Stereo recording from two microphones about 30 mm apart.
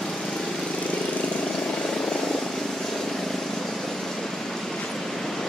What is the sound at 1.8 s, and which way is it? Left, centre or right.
Vehicle, left.